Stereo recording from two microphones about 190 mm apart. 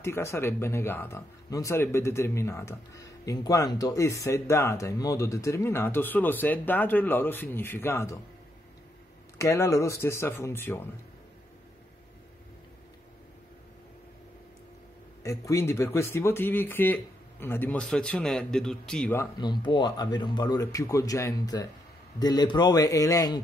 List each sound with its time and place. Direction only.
0.0 s speech: 15° left (ahead or behind)
9.4 s speech: 15° left (ahead or behind)
15.2 s speech: 15° left (ahead or behind)
19.4 s speech: 25° left (ahead or behind)